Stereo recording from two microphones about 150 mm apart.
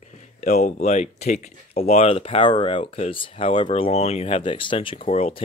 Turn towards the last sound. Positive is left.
turn(degrees=40)  # may be behind; listen again after turning